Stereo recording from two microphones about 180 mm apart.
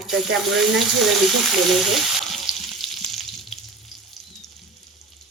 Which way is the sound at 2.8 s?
Centre (ahead or behind).